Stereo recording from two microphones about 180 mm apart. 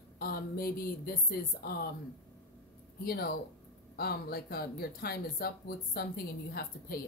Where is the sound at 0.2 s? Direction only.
55° left (ahead or behind).